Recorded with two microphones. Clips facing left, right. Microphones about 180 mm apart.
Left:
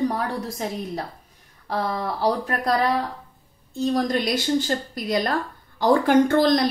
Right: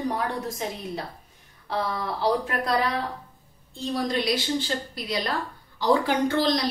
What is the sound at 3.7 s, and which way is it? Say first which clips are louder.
A woman's voice: left 5 dB; 45° left (ahead or behind).